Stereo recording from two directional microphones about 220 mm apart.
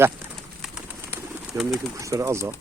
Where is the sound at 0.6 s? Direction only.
5° right (ahead or behind).